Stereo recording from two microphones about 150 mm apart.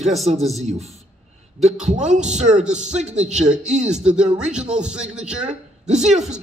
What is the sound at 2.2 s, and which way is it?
Speech, 50° right (ahead or behind).